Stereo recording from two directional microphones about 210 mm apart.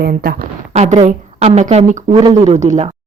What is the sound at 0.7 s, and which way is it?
A woman's voice, 30° right (ahead or behind).